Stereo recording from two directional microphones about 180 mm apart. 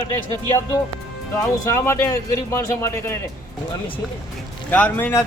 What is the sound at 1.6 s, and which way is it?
A man's voice, 15° left (ahead or behind).